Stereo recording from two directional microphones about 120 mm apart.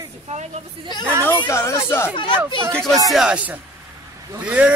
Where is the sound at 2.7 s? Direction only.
5° left (ahead or behind).